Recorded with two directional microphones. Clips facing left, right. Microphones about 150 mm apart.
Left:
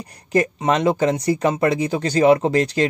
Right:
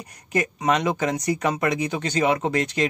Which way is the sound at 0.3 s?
30° left (ahead or behind).